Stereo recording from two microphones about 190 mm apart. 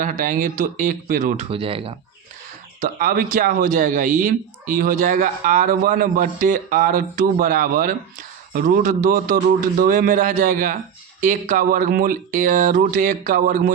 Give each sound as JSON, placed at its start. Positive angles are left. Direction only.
{"t": 0.0, "sound": "speech", "side_deg": -45}
{"t": 1.5, "sound": "speech", "side_deg": -30}
{"t": 2.8, "sound": "speech", "side_deg": -45}